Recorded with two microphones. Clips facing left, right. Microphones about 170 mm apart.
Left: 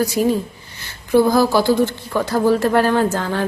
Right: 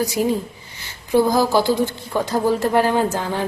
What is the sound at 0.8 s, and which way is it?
A woman's voice, 15° right (ahead or behind).